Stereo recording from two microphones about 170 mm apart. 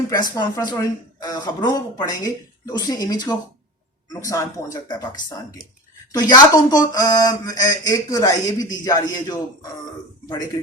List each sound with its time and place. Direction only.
0.1 s a woman's voice: 25° left (ahead or behind)